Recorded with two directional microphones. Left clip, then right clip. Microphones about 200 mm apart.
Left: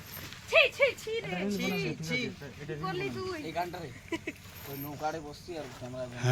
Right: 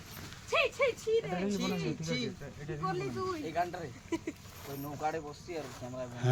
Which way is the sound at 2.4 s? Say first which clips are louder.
Even; 50° right (ahead or behind).